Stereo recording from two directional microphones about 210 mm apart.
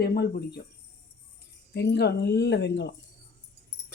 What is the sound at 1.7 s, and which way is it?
Speech, 50° left (ahead or behind).